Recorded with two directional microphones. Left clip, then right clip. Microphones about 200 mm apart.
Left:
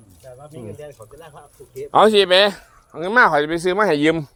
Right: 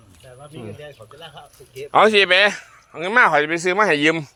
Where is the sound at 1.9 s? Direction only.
30° left (ahead or behind).